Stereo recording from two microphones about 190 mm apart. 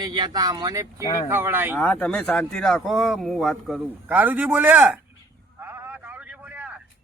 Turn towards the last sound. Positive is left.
turn(degrees=-5)  # may be behind; listen again after turning